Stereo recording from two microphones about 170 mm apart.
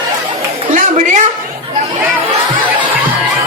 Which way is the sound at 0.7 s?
50° right (ahead or behind).